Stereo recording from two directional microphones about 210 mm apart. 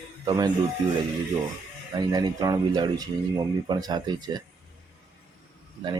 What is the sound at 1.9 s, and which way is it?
Speech, 20° right (ahead or behind).